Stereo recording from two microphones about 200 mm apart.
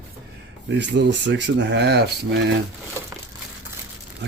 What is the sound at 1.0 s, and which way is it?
Speech, 60° right (ahead or behind).